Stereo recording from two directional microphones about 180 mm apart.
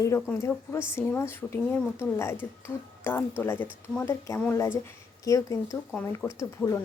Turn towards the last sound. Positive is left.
turn(degrees=15)  # may be behind; listen again after turning